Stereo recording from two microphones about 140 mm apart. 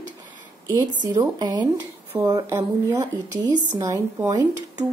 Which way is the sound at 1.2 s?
30° right (ahead or behind).